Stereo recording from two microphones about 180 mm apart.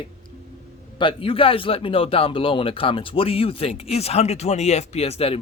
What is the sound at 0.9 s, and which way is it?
A man's voice, 30° left (ahead or behind).